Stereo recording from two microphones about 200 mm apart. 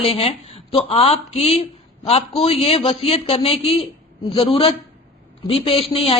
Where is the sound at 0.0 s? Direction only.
30° left (ahead or behind).